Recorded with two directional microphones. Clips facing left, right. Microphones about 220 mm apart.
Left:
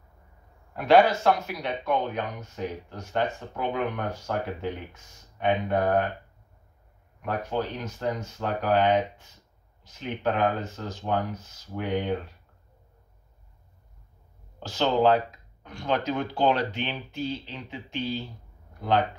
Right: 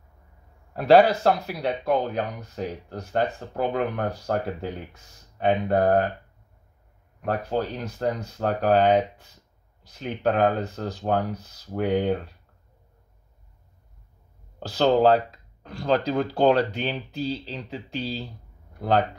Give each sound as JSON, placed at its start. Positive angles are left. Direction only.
{"t": 0.7, "sound": "speech", "side_deg": -35}
{"t": 7.2, "sound": "speech", "side_deg": -35}
{"t": 14.6, "sound": "speech", "side_deg": -35}